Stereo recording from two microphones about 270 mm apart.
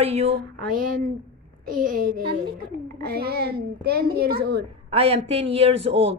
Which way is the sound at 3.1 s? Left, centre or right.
Right.